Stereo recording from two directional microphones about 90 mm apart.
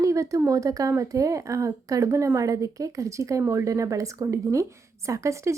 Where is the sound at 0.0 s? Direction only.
35° right (ahead or behind).